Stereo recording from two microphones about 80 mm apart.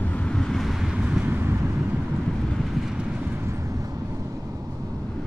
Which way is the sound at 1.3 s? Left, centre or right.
Right.